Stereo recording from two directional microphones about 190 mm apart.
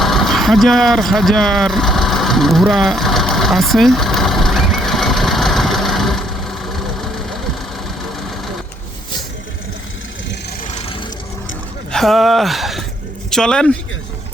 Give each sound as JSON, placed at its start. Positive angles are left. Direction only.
{"t": 0.0, "sound": "vehicle", "side_deg": 0}
{"t": 10.7, "sound": "rub", "side_deg": 35}
{"t": 11.9, "sound": "speech", "side_deg": 0}